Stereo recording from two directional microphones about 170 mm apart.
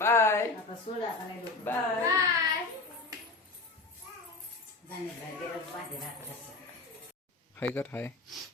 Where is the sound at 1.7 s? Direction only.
10° left (ahead or behind).